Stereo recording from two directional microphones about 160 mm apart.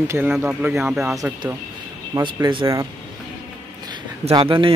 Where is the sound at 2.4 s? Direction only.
20° right (ahead or behind).